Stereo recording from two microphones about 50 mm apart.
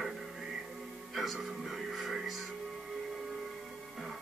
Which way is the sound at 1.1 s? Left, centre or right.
Centre.